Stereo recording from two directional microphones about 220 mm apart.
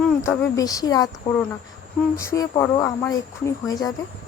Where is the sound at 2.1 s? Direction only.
15° left (ahead or behind).